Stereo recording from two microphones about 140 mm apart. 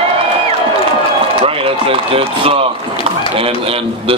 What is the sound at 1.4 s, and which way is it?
A man's voice, 40° right (ahead or behind).